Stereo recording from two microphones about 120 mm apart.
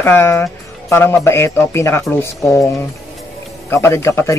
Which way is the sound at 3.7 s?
20° left (ahead or behind).